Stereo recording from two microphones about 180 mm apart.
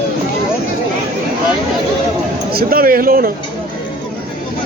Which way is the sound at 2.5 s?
55° right (ahead or behind).